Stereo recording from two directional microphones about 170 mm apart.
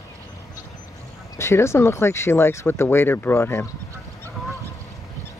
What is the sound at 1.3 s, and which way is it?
Speech, 15° left (ahead or behind).